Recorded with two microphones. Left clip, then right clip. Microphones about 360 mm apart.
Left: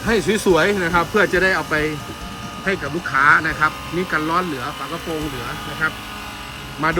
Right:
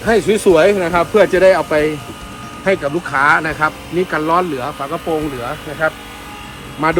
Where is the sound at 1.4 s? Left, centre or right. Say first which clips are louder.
Right 7 dB; centre.